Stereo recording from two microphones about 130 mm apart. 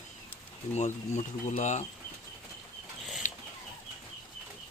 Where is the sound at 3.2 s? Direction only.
65° left (ahead or behind).